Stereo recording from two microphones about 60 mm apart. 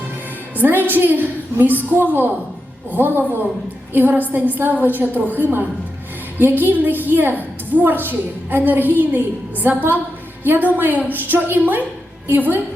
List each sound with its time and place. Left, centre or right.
0.5 s a woman's voice: right
4.3 s a woman's voice: right